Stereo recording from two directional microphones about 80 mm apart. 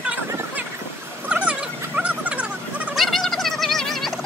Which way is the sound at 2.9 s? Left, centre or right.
Centre.